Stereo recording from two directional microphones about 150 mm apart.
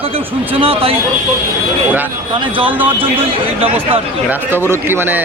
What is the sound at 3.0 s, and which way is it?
Speech, 40° right (ahead or behind).